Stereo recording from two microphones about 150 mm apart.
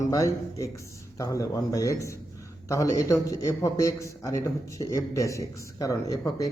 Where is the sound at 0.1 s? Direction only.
20° left (ahead or behind).